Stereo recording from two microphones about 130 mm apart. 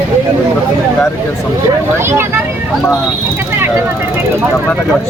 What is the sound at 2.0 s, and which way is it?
Speech, 20° right (ahead or behind).